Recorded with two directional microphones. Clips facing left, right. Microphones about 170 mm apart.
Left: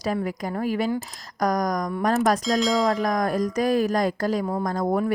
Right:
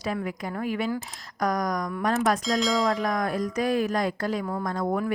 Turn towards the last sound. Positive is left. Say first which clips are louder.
# left 3 dB
turn(degrees=40)  # may be behind; listen again after turning